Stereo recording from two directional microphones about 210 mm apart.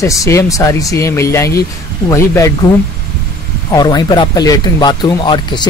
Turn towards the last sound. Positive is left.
turn(degrees=20)  # may be behind; listen again after turning